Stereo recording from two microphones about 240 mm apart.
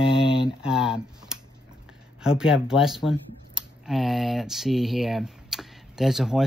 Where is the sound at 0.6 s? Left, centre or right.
Centre.